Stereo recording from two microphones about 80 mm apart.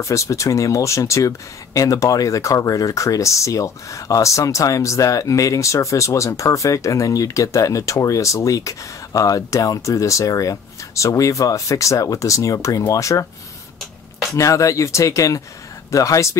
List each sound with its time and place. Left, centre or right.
0.0 s speech: left
14.3 s speech: left